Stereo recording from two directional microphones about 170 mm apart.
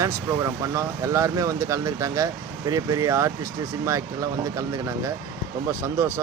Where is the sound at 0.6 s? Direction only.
20° right (ahead or behind).